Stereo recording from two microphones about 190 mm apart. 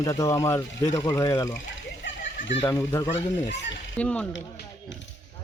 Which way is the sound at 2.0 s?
75° left (ahead or behind).